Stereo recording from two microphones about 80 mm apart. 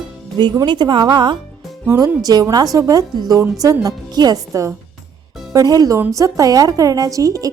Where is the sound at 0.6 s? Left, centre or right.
Right.